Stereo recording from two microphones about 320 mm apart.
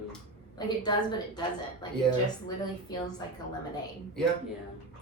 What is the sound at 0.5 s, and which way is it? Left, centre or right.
Speech, centre.